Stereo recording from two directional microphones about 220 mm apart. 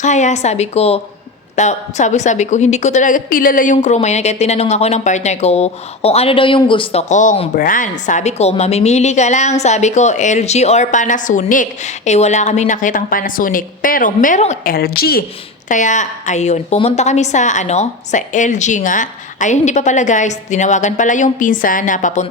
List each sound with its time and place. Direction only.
0.0 s a woman's voice: 30° left (ahead or behind)